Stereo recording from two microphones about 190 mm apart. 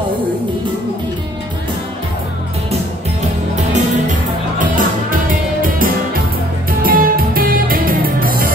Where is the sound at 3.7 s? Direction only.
45° right (ahead or behind).